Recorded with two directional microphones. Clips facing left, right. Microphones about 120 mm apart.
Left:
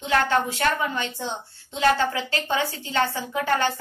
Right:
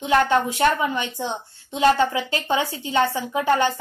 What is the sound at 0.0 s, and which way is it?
A woman's voice, 15° right (ahead or behind).